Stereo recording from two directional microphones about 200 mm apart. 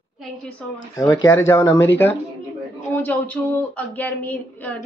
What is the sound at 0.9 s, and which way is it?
Speech, 15° left (ahead or behind).